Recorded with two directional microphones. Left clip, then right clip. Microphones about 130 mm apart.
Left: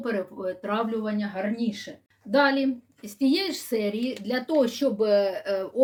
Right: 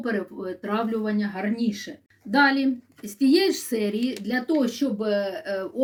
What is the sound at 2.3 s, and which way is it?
Speech, 30° left (ahead or behind).